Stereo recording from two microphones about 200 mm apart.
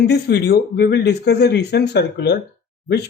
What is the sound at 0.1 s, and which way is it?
Speech, 55° left (ahead or behind).